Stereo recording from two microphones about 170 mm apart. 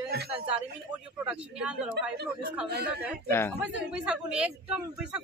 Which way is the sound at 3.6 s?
5° right (ahead or behind).